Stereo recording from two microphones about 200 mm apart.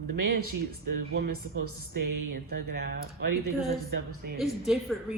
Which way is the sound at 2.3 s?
50° right (ahead or behind).